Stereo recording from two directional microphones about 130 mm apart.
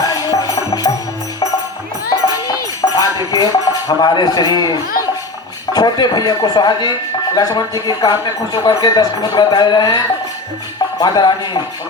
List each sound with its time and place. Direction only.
0.1 s music: 30° left (ahead or behind)
2.0 s music: 30° left (ahead or behind)
5.7 s speech: 30° left (ahead or behind)
11.0 s speech: 35° left (ahead or behind)